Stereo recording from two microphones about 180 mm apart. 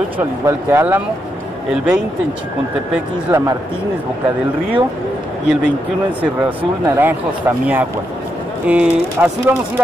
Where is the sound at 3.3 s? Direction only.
15° right (ahead or behind).